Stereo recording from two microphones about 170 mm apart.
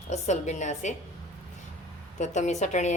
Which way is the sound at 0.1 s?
45° left (ahead or behind).